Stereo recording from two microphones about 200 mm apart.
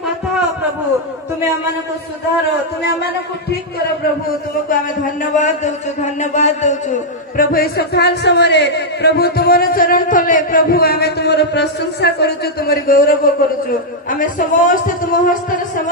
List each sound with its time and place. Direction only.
6.3 s a man's voice: 35° left (ahead or behind)